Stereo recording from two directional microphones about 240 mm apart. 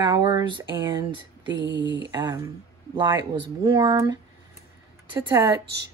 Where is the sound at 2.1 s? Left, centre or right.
Centre.